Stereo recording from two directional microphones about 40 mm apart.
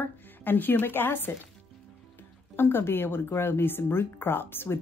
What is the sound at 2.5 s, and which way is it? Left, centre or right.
Speech, left.